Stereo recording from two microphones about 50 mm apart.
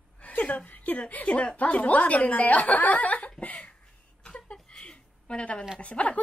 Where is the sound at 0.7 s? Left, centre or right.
Left.